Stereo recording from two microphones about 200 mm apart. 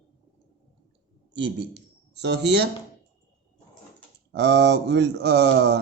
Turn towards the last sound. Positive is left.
turn(degrees=-55)  # may be behind; listen again after turning